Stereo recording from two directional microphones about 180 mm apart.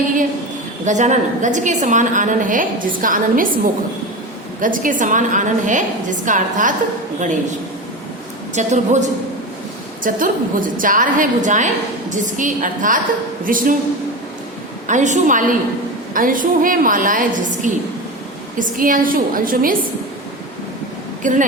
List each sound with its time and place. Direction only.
0.9 s a woman's voice: 40° right (ahead or behind)
4.6 s a woman's voice: 50° right (ahead or behind)
8.5 s a woman's voice: 40° right (ahead or behind)
14.8 s a woman's voice: 45° right (ahead or behind)
21.2 s a woman's voice: 45° right (ahead or behind)